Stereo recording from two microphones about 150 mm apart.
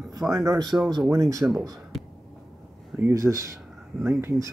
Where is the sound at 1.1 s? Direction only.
20° right (ahead or behind).